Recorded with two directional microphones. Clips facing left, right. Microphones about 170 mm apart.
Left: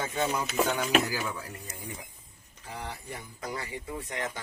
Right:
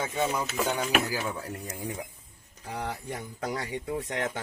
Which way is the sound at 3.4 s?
70° right (ahead or behind).